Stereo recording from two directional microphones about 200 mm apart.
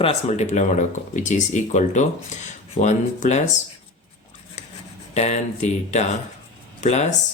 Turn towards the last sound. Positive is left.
turn(degrees=35)  # may be behind; listen again after turning